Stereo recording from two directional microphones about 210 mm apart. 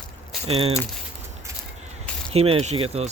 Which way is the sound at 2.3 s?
30° right (ahead or behind).